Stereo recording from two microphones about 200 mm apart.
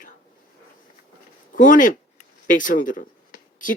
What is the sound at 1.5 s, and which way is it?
Speech, 40° left (ahead or behind).